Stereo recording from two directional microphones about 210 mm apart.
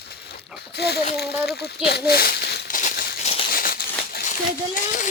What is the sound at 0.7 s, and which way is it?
Speech, 50° left (ahead or behind).